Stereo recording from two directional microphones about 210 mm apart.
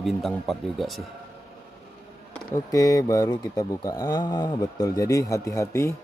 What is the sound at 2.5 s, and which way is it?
Speech, 15° left (ahead or behind).